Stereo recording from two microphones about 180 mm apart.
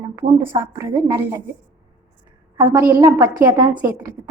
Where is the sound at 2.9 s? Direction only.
20° right (ahead or behind).